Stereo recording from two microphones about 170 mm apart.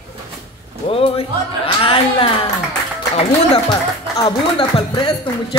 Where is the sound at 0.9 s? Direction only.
35° left (ahead or behind).